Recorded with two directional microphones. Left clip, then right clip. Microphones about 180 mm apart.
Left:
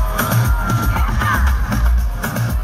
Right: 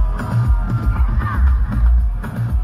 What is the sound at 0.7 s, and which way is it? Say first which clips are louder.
Music: left 8 dB; 35° left (ahead or behind).